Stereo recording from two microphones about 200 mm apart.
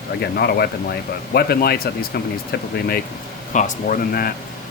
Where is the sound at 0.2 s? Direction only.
50° left (ahead or behind).